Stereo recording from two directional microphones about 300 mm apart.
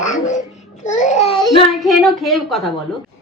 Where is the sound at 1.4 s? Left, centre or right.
Centre.